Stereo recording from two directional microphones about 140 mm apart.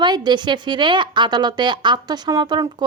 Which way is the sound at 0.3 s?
30° right (ahead or behind).